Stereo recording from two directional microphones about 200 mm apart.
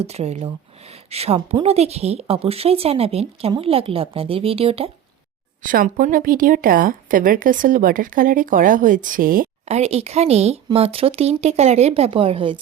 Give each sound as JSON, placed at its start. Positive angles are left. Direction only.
{"t": 0.0, "sound": "a woman's voice", "side_deg": -30}
{"t": 5.6, "sound": "speech", "side_deg": -45}